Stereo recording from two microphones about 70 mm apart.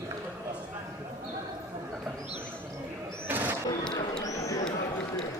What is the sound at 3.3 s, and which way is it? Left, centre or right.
Bird, right.